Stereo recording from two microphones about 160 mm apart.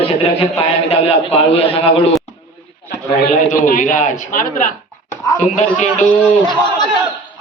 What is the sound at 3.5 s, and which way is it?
A man's voice, 50° left (ahead or behind).